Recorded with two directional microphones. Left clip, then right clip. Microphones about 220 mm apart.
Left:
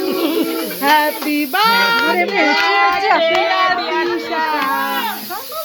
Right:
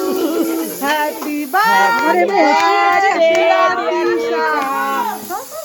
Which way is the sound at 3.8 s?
25° left (ahead or behind).